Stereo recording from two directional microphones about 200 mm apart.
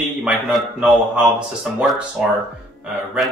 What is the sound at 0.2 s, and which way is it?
A man's voice, centre (ahead or behind).